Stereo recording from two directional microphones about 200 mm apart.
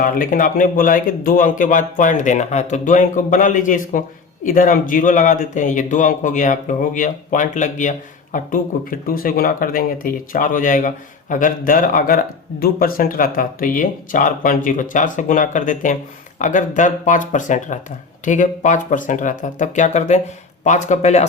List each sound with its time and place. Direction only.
0.0 s speech: 45° left (ahead or behind)